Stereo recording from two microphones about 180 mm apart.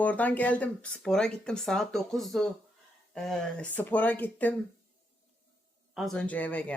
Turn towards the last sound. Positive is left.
turn(degrees=10)  # may be behind; listen again after turning